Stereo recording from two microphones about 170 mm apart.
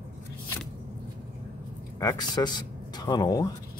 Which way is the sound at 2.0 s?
25° left (ahead or behind).